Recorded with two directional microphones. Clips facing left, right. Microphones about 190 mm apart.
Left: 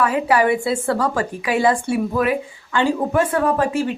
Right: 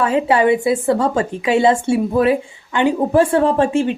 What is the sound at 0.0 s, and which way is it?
Speech, 25° right (ahead or behind).